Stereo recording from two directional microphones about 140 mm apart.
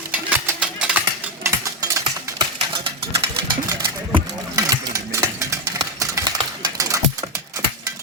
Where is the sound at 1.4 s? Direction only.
20° right (ahead or behind).